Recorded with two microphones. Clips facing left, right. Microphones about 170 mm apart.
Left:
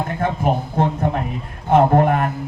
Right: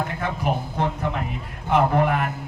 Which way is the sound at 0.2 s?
50° left (ahead or behind).